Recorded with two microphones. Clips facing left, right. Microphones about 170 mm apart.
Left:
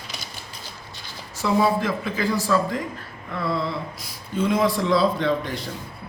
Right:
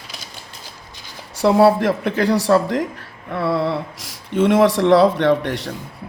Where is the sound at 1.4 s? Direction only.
70° right (ahead or behind).